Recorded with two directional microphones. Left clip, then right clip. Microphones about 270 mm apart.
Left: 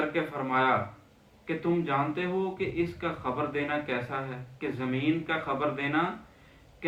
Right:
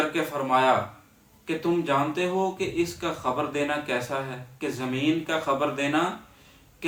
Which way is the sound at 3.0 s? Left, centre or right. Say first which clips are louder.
Right 4 dB; centre.